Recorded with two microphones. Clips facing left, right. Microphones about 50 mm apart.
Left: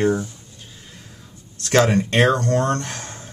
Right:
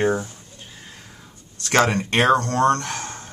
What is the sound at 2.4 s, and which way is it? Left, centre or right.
Speech, right.